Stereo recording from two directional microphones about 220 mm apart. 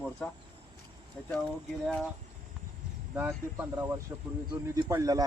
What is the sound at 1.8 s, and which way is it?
Speech, 5° left (ahead or behind).